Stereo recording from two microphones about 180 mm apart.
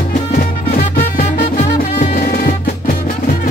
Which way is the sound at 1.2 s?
55° left (ahead or behind).